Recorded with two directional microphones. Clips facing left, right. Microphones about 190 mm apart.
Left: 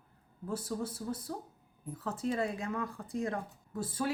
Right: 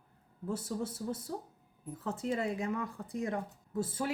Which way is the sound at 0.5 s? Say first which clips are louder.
Left 1 dB; 25° right (ahead or behind).